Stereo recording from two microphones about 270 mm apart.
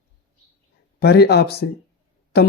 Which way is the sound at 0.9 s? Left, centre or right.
Left.